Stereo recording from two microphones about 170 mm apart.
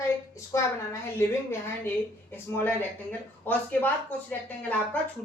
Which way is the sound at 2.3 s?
10° left (ahead or behind).